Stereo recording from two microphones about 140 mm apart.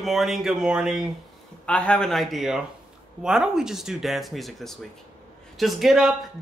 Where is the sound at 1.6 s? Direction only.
10° left (ahead or behind).